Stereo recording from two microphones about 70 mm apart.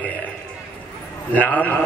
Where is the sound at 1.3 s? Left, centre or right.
Left.